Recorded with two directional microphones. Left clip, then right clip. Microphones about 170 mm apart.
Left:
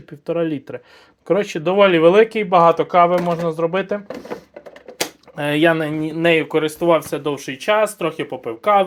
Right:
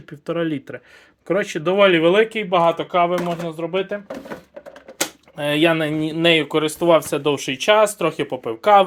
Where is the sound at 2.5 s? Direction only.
30° left (ahead or behind).